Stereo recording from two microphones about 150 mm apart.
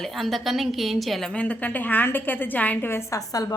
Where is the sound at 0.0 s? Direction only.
Centre (ahead or behind).